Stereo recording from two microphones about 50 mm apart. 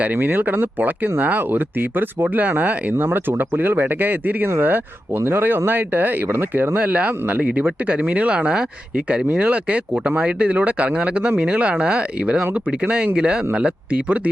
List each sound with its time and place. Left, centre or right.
0.1 s speech: right
0.8 s speech: right
4.4 s speech: right
6.7 s speech: right
8.4 s speech: centre